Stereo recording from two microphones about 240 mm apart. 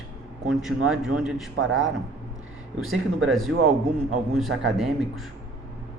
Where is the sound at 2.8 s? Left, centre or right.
Centre.